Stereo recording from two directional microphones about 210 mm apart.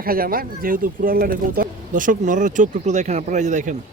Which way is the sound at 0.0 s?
45° right (ahead or behind).